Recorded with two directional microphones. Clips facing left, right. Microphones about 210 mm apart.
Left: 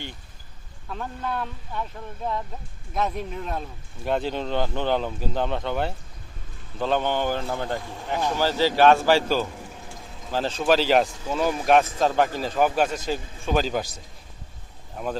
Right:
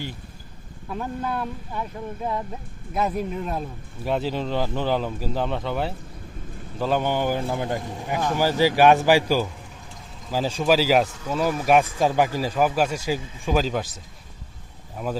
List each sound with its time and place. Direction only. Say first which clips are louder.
0.9 s speech: right 3 dB; 5° right (ahead or behind)